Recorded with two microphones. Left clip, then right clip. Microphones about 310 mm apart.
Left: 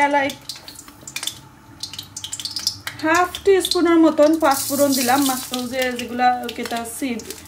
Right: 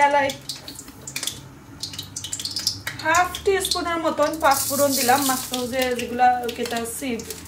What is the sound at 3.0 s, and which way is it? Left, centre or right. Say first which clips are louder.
Speech: left 2 dB; left.